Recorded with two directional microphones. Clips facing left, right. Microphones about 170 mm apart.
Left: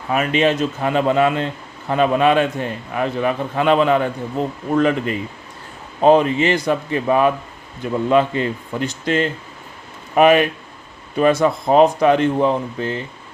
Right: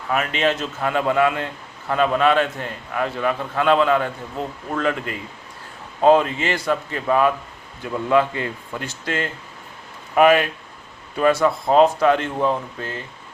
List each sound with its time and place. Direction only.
0.1 s a man's voice: 20° left (ahead or behind)